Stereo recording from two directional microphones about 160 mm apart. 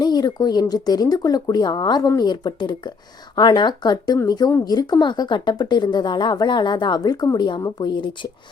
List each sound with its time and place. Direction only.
0.0 s a woman's voice: 25° left (ahead or behind)